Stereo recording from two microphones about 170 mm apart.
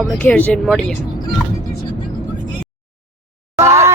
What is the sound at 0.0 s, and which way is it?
Speech, 10° left (ahead or behind).